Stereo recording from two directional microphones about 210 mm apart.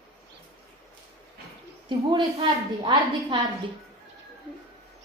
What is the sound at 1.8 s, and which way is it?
A woman's voice, 20° right (ahead or behind).